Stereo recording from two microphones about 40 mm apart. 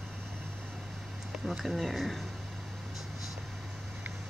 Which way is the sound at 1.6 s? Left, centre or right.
Centre.